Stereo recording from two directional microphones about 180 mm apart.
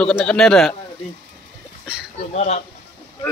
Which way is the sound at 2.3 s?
35° left (ahead or behind).